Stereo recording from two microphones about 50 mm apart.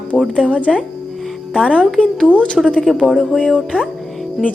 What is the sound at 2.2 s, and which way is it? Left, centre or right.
Speech, left.